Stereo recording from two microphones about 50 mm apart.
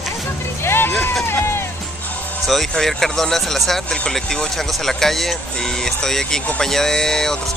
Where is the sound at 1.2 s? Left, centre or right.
Left.